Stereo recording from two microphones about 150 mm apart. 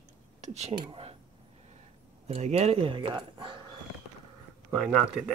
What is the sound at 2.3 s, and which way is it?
Speech, 45° right (ahead or behind).